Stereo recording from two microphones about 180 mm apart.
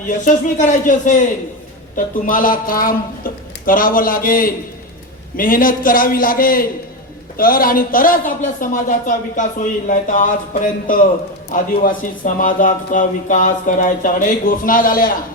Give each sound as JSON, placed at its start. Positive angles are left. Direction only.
{"t": 0.0, "sound": "a man's voice", "side_deg": 45}